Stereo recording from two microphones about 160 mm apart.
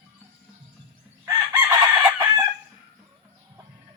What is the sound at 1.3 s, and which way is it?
Chicken, 20° right (ahead or behind).